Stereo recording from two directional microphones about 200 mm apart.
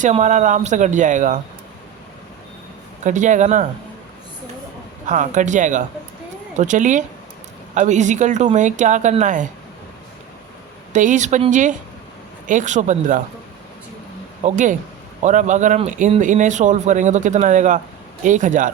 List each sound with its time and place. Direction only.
0.0 s speech: 35° right (ahead or behind)
3.0 s speech: 40° right (ahead or behind)
5.0 s speech: 40° right (ahead or behind)
10.9 s speech: 40° right (ahead or behind)
14.4 s speech: 40° right (ahead or behind)